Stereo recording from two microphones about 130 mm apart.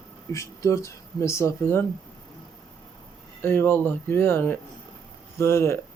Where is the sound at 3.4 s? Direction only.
15° left (ahead or behind).